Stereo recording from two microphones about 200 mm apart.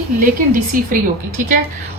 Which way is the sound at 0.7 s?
45° right (ahead or behind).